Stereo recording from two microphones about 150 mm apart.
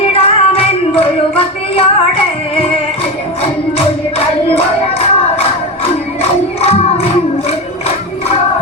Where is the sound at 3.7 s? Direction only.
40° left (ahead or behind).